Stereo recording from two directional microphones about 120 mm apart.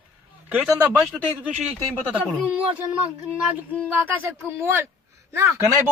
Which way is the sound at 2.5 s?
10° right (ahead or behind).